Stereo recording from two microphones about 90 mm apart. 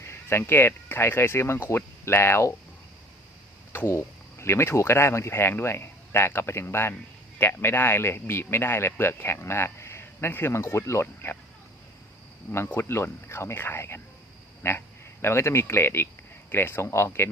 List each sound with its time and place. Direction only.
0.0 s speech: 30° left (ahead or behind)
3.7 s speech: 25° left (ahead or behind)
12.5 s speech: 25° left (ahead or behind)